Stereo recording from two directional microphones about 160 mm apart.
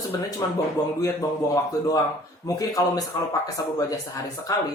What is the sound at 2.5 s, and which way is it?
Speech, 20° left (ahead or behind).